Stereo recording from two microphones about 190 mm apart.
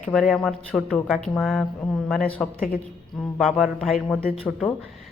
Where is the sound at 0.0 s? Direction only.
Centre (ahead or behind).